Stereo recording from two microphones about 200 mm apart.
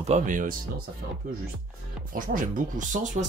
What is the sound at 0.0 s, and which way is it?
Speech, 35° right (ahead or behind).